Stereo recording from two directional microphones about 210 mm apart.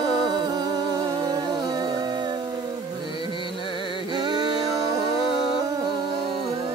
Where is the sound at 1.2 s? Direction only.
20° right (ahead or behind).